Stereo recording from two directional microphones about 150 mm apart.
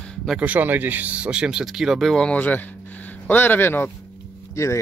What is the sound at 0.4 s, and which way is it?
Speech, 10° right (ahead or behind).